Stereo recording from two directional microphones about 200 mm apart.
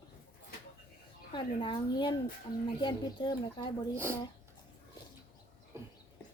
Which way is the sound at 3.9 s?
10° right (ahead or behind).